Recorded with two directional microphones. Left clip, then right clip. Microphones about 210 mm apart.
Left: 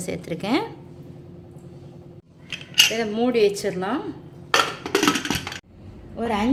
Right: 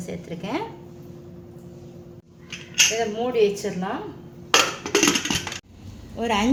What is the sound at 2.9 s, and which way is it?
Speech, 45° left (ahead or behind).